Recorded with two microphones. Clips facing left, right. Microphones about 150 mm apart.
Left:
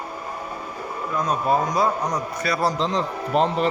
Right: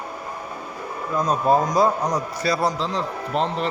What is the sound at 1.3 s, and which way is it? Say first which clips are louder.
Speech: right 3 dB; 35° right (ahead or behind).